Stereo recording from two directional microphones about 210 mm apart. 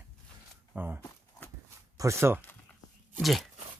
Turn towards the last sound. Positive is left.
turn(degrees=0)  # may be behind; listen again after turning